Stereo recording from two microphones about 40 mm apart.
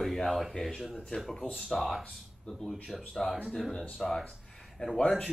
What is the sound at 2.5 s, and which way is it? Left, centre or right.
Speech, centre.